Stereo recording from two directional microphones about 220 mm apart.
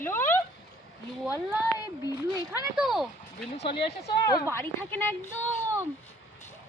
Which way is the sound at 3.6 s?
25° left (ahead or behind).